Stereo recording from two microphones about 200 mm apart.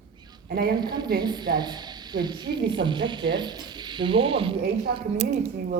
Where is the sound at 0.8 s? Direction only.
20° right (ahead or behind).